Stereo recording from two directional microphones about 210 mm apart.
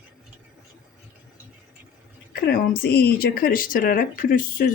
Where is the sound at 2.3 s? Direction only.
50° left (ahead or behind).